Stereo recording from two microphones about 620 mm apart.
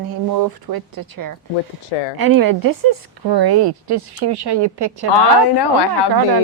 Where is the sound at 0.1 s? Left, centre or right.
Right.